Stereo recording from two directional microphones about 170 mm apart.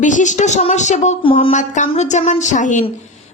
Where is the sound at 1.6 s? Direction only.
45° left (ahead or behind).